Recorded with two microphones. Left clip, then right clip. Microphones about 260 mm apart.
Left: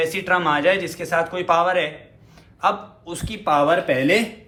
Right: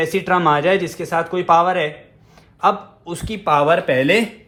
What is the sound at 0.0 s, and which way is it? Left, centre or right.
A man's voice, right.